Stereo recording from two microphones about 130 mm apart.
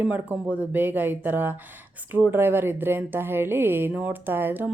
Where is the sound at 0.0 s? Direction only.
10° right (ahead or behind).